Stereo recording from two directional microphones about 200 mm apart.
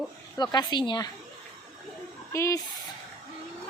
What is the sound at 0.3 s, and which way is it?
Speech, 20° left (ahead or behind).